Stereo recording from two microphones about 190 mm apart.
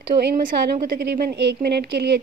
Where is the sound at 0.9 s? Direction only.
55° right (ahead or behind).